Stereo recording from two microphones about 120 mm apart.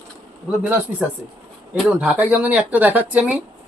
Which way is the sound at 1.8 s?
5° right (ahead or behind).